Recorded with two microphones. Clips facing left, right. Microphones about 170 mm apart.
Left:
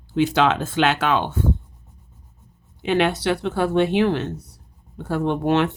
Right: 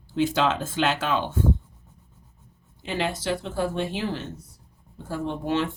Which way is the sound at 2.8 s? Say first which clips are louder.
Left 7 dB; 70° left (ahead or behind).